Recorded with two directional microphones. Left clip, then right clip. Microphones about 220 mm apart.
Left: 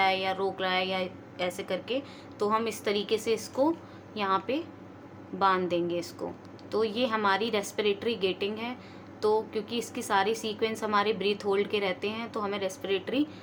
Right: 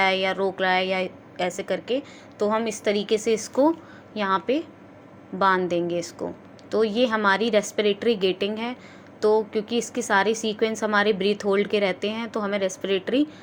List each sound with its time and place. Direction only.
0.0 s a woman's voice: 20° right (ahead or behind)